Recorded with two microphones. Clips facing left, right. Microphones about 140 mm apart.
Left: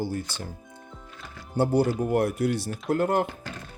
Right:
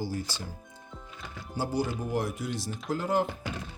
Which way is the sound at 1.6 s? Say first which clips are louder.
Left 8 dB; 60° left (ahead or behind).